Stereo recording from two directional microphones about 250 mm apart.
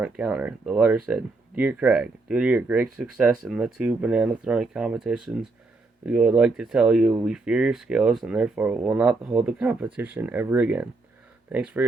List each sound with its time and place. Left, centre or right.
0.0 s speech: centre